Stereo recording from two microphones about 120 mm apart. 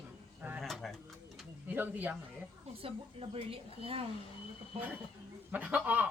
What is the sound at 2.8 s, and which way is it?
Speech, 50° right (ahead or behind).